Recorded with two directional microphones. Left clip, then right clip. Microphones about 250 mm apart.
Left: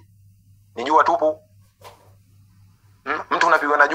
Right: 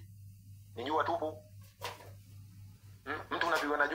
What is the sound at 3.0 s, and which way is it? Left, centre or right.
Speech, left.